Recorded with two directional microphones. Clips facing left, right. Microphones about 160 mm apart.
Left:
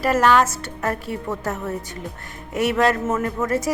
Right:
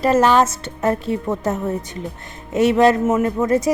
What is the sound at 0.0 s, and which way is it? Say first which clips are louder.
A woman's voice: right 3 dB; 25° right (ahead or behind).